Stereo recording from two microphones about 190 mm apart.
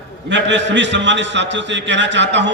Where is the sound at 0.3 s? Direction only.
70° right (ahead or behind).